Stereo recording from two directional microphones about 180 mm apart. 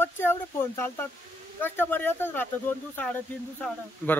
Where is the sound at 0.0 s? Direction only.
10° left (ahead or behind).